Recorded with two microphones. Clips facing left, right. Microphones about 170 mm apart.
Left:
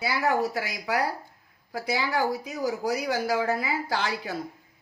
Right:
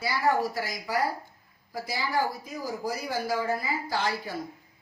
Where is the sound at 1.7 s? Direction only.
75° left (ahead or behind).